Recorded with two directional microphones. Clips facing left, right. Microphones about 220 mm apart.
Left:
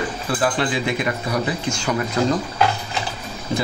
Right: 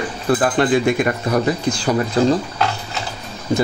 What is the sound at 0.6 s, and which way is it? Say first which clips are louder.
Speech: right 7 dB; 50° right (ahead or behind).